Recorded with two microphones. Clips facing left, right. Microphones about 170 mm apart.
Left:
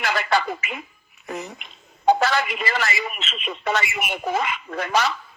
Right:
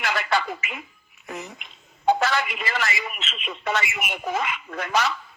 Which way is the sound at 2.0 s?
35° left (ahead or behind).